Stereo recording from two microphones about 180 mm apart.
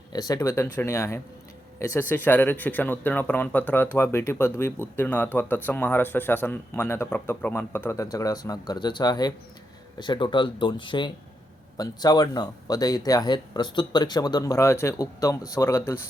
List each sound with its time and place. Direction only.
0.1 s a man's voice: 20° left (ahead or behind)